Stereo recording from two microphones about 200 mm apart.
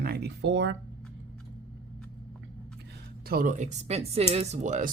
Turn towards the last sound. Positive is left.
turn(degrees=-40)  # may be behind; listen again after turning